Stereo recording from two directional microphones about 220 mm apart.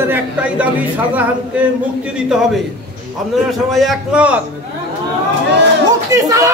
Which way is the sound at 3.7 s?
Centre (ahead or behind).